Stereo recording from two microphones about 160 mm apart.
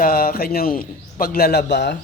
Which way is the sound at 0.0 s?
60° left (ahead or behind).